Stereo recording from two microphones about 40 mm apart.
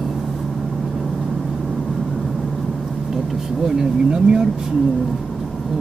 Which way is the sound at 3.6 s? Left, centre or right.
Centre.